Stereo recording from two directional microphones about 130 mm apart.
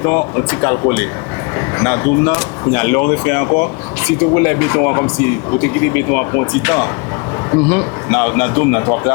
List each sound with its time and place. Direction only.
0.0 s speech: 20° left (ahead or behind)